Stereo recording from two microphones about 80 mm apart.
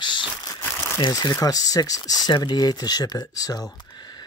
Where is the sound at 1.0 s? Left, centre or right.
Left.